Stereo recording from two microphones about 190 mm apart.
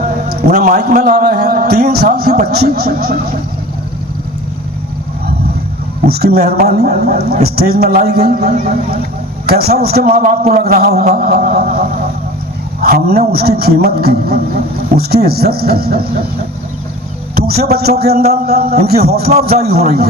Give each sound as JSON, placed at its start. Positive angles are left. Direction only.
{"t": 0.4, "sound": "a man's voice", "side_deg": -55}
{"t": 6.1, "sound": "a man's voice", "side_deg": -55}
{"t": 17.3, "sound": "a man's voice", "side_deg": -55}